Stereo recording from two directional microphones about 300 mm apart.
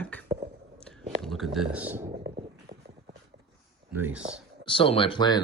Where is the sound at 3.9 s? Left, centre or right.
Centre.